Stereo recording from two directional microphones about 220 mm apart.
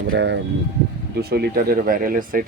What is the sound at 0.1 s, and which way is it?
Speech, 55° right (ahead or behind).